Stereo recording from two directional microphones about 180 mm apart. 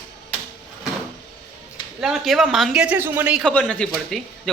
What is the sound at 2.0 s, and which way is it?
Speech, centre (ahead or behind).